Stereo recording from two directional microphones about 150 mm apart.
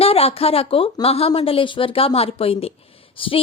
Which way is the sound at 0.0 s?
40° left (ahead or behind).